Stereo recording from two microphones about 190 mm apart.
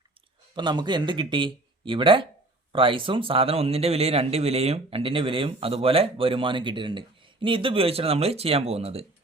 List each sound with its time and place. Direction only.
0.5 s a man's voice: 25° right (ahead or behind)